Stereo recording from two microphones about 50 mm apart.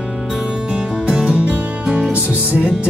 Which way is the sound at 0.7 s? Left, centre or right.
Centre.